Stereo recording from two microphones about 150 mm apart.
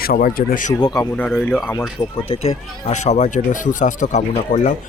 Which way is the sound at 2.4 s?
50° left (ahead or behind).